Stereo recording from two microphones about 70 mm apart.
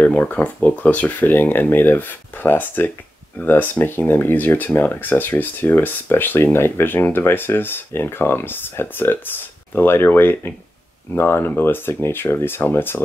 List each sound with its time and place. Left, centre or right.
0.0 s speech: left